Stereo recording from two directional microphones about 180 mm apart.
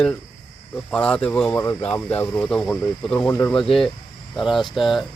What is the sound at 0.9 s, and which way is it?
Speech, 5° left (ahead or behind).